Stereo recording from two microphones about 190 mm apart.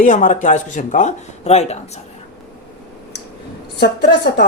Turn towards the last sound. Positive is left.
turn(degrees=65)  # may be behind; listen again after turning